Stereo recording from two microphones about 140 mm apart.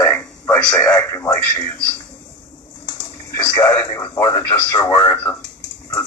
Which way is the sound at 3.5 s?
20° left (ahead or behind).